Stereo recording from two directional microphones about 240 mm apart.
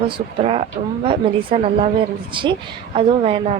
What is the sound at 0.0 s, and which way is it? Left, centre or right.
Speech, right.